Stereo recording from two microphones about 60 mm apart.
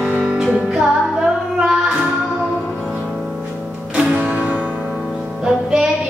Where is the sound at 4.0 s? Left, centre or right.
Right.